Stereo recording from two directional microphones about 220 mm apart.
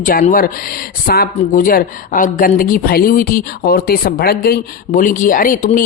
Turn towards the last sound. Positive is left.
turn(degrees=40)  # may be behind; listen again after turning